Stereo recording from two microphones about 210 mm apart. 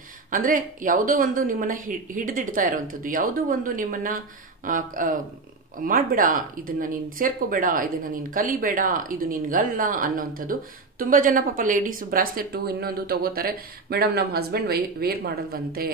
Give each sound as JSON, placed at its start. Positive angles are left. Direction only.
{"t": 0.3, "sound": "speech", "side_deg": -40}